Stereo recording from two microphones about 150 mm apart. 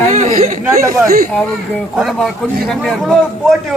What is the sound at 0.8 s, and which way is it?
Speech, 20° right (ahead or behind).